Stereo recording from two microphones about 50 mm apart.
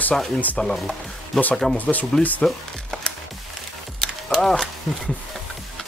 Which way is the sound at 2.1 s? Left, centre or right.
Centre.